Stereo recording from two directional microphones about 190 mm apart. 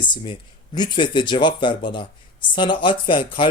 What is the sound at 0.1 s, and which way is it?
Speech, 25° left (ahead or behind).